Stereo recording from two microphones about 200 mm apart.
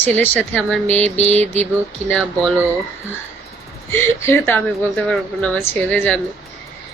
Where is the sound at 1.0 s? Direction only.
35° right (ahead or behind).